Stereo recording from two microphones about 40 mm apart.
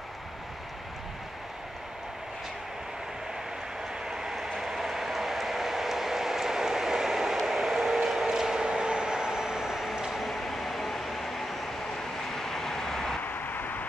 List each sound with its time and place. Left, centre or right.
4.0 s train: centre
8.6 s a sound: right
10.2 s train: centre
12.3 s vehicle: centre
13.2 s vehicle: left